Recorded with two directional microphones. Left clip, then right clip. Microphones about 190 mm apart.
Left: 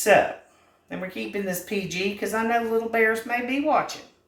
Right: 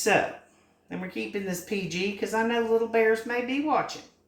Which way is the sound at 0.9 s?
20° left (ahead or behind).